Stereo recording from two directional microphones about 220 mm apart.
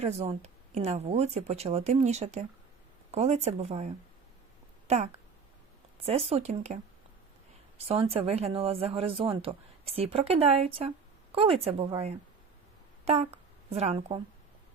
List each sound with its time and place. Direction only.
0.0 s speech: 30° right (ahead or behind)
6.1 s speech: 25° right (ahead or behind)
7.8 s speech: 25° right (ahead or behind)
13.7 s speech: 30° right (ahead or behind)